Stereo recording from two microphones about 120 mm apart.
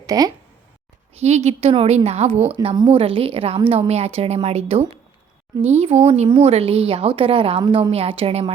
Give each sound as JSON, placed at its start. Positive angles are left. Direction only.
{"t": 0.0, "sound": "speech", "side_deg": -30}
{"t": 1.1, "sound": "a woman's voice", "side_deg": -65}
{"t": 2.6, "sound": "speech", "side_deg": -40}